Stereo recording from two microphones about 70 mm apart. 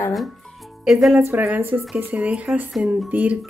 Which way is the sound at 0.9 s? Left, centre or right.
Centre.